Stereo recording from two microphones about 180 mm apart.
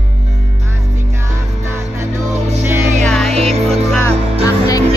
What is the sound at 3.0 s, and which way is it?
Music, centre (ahead or behind).